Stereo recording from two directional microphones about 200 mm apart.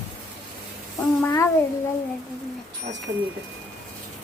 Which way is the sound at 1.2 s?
15° left (ahead or behind).